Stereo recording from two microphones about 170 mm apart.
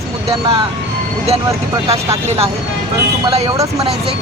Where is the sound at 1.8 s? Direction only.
35° right (ahead or behind).